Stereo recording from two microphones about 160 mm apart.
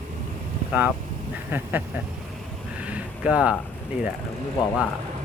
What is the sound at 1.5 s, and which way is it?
Speech, 10° right (ahead or behind).